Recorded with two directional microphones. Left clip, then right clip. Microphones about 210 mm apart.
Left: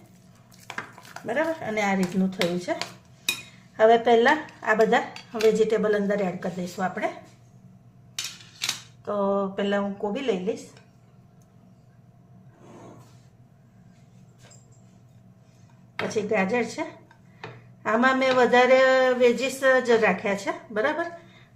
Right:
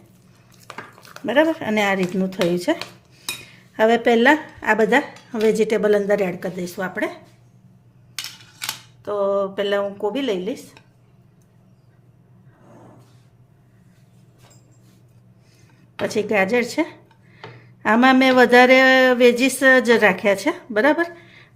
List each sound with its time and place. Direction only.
1.3 s speech: 50° right (ahead or behind)
3.8 s speech: 45° right (ahead or behind)
9.0 s speech: 55° right (ahead or behind)
16.0 s speech: 55° right (ahead or behind)
17.8 s speech: 50° right (ahead or behind)